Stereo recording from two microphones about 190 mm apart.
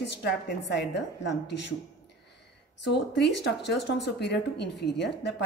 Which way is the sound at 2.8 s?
65° left (ahead or behind).